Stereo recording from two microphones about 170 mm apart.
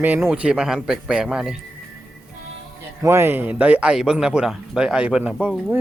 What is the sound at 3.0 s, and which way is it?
A man's voice, 15° right (ahead or behind).